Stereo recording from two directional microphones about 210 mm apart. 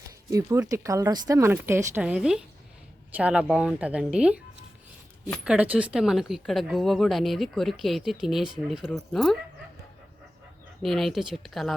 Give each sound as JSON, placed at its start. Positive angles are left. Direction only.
{"t": 0.3, "sound": "a woman's voice", "side_deg": -15}
{"t": 5.5, "sound": "a woman's voice", "side_deg": -5}
{"t": 10.8, "sound": "a woman's voice", "side_deg": 0}